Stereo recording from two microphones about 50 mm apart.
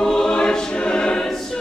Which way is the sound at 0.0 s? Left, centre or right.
Centre.